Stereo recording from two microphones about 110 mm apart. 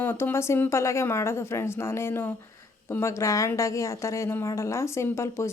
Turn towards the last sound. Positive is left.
turn(degrees=25)  # may be behind; listen again after turning